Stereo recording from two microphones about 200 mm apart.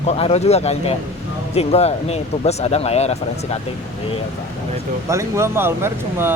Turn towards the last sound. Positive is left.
turn(degrees=-10)  # may be behind; listen again after turning